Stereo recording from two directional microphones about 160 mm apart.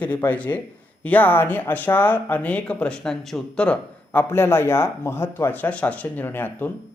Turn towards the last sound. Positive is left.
turn(degrees=10)  # may be behind; listen again after turning